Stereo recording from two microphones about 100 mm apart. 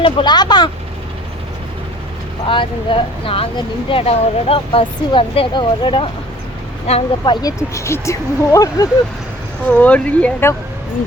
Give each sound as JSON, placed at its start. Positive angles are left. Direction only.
{"t": 0.0, "sound": "speech", "side_deg": 50}
{"t": 2.5, "sound": "speech", "side_deg": 60}
{"t": 3.8, "sound": "speech", "side_deg": 75}
{"t": 6.9, "sound": "speech", "side_deg": 90}
{"t": 7.2, "sound": "speech", "side_deg": 45}
{"t": 7.7, "sound": "speech", "side_deg": 30}
{"t": 9.6, "sound": "speech", "side_deg": 15}